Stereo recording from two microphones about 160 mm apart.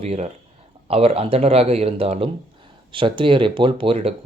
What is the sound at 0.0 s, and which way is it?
Speech, 40° right (ahead or behind).